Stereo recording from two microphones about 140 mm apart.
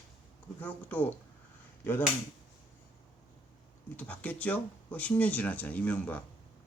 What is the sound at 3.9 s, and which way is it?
Speech, 10° left (ahead or behind).